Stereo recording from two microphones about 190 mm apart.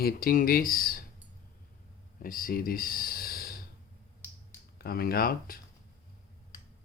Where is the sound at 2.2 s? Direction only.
50° left (ahead or behind).